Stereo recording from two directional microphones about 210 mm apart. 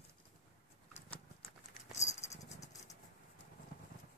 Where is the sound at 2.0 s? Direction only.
15° left (ahead or behind).